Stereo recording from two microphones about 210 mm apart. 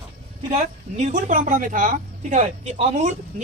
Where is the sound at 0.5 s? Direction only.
35° right (ahead or behind).